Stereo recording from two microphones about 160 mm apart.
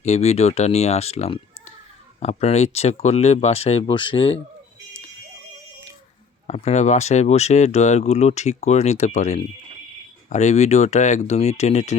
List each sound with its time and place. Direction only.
0.0 s speech: 45° left (ahead or behind)
6.5 s speech: 45° left (ahead or behind)